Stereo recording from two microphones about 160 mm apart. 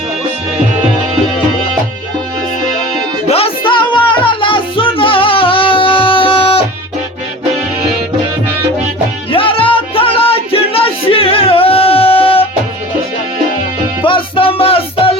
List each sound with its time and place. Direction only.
3.2 s music: 40° left (ahead or behind)
9.3 s music: 35° left (ahead or behind)
14.0 s music: 30° left (ahead or behind)